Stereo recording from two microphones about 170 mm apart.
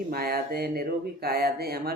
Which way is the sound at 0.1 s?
60° right (ahead or behind).